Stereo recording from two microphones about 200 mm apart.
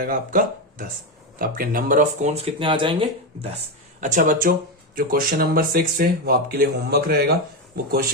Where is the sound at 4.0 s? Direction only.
40° right (ahead or behind).